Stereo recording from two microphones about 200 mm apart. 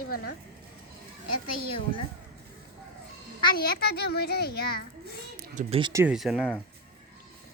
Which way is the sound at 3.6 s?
50° left (ahead or behind).